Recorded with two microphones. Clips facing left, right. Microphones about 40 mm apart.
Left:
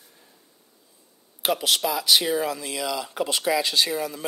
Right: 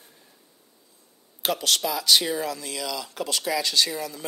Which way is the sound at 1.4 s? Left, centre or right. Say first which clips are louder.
Left 2 dB; centre.